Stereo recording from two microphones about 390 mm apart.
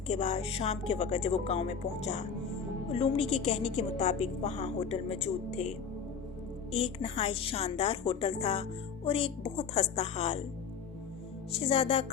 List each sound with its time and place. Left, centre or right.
0.1 s speech: centre
11.5 s speech: centre